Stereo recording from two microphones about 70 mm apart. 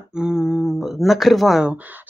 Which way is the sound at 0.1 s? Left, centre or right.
Centre.